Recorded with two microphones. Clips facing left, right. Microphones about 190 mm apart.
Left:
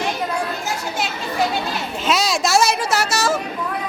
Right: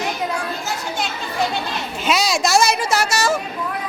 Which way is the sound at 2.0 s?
Centre (ahead or behind).